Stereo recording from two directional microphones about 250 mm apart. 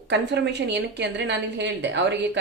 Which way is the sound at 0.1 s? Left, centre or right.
Right.